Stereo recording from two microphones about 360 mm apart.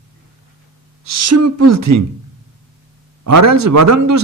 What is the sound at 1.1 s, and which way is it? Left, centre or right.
Speech, right.